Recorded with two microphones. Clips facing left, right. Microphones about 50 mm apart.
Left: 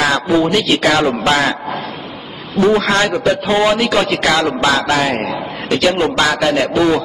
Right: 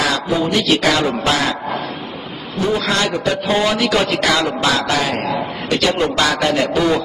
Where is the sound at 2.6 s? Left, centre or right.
Left.